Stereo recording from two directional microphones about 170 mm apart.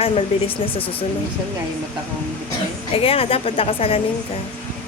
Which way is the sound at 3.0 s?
35° left (ahead or behind).